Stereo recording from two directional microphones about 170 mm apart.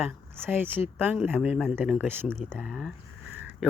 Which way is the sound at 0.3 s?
15° right (ahead or behind).